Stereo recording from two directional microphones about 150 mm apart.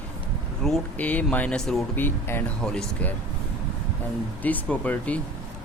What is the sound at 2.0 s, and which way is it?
Speech, 15° left (ahead or behind).